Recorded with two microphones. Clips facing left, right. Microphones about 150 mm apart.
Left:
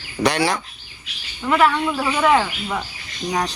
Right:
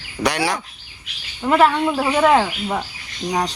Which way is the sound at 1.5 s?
35° right (ahead or behind).